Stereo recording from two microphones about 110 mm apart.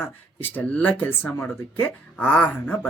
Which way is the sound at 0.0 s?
15° left (ahead or behind).